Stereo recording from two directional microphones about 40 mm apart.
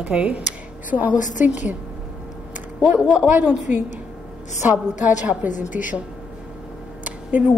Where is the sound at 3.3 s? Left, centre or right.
Right.